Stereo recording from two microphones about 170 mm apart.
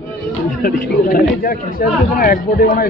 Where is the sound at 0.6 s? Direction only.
60° left (ahead or behind).